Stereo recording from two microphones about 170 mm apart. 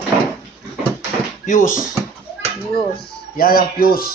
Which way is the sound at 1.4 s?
50° left (ahead or behind).